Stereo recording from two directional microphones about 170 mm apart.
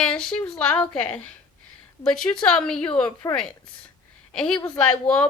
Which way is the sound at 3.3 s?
20° left (ahead or behind).